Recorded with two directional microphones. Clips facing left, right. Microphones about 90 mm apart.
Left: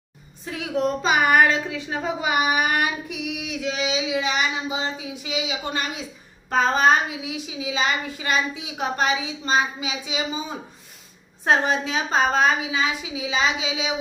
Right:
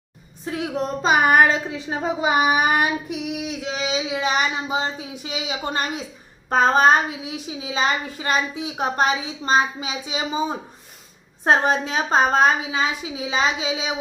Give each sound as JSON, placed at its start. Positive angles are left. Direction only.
{"t": 0.4, "sound": "a woman's voice", "side_deg": -35}
{"t": 11.4, "sound": "speech", "side_deg": -40}